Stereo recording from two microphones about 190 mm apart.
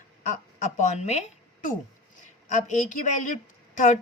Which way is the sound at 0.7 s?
35° left (ahead or behind).